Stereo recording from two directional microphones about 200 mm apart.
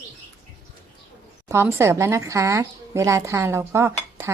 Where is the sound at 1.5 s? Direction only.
15° right (ahead or behind).